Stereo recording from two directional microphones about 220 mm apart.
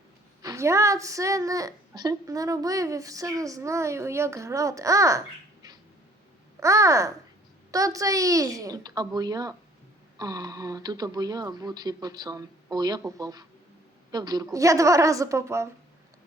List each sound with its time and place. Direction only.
0.4 s a woman's voice: 15° right (ahead or behind)
6.6 s a woman's voice: 15° right (ahead or behind)